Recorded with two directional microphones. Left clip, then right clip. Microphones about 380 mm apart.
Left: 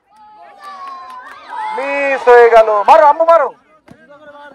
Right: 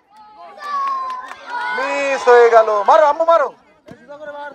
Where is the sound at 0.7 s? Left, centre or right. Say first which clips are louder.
Right 9 dB; right.